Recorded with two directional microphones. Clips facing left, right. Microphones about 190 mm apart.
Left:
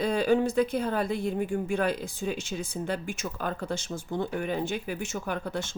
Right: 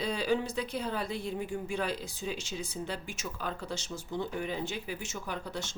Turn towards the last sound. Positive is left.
turn(degrees=55)  # may be behind; listen again after turning